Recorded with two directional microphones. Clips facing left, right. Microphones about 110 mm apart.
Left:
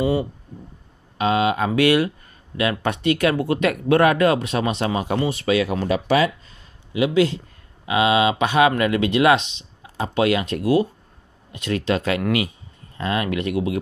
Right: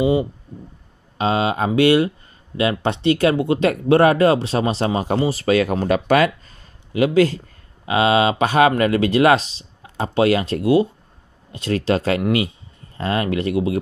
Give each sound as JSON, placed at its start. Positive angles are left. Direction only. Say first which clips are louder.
{"t": 0.0, "sound": "speech", "louder": "right 3 dB", "side_deg": -20}
{"t": 1.1, "sound": "speech", "louder": "even", "side_deg": -30}